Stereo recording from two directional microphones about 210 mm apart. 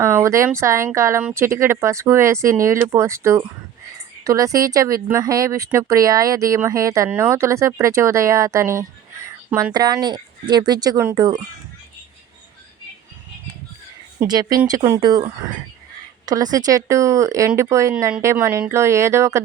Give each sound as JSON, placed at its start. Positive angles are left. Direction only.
{"t": 0.0, "sound": "speech", "side_deg": -15}
{"t": 14.2, "sound": "speech", "side_deg": -15}
{"t": 16.2, "sound": "speech", "side_deg": -15}